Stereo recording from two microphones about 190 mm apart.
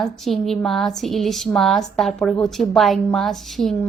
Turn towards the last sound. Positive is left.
turn(degrees=0)  # may be behind; listen again after turning